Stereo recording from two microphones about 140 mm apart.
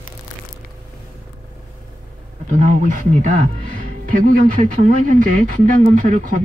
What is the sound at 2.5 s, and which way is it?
Speech, 65° right (ahead or behind).